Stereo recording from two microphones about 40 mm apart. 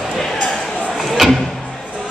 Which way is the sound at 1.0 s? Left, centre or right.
Centre.